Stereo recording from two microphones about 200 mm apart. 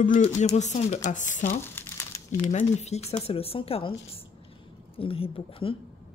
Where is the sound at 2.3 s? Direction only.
35° left (ahead or behind).